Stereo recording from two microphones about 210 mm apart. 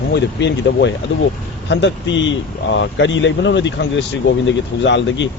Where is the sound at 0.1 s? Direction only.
55° left (ahead or behind).